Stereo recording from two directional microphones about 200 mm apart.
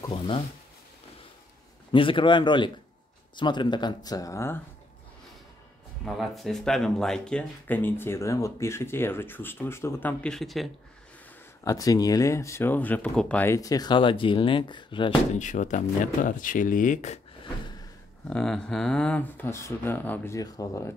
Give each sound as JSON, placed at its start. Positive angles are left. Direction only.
{"t": 1.9, "sound": "speech", "side_deg": 25}
{"t": 6.0, "sound": "speech", "side_deg": 0}
{"t": 11.6, "sound": "speech", "side_deg": 15}
{"t": 15.3, "sound": "speech", "side_deg": 40}
{"t": 18.3, "sound": "speech", "side_deg": 5}